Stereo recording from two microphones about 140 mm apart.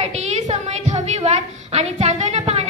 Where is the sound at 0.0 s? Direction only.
55° right (ahead or behind).